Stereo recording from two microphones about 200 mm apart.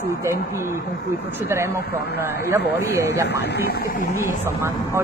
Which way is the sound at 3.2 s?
60° left (ahead or behind).